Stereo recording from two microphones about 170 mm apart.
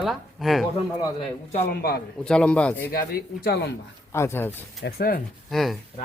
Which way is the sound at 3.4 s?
70° left (ahead or behind).